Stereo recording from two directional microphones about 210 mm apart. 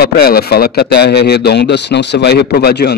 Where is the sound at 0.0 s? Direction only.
45° left (ahead or behind).